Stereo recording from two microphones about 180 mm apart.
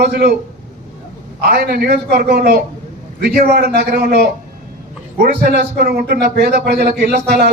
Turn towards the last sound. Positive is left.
turn(degrees=-60)  # may be behind; listen again after turning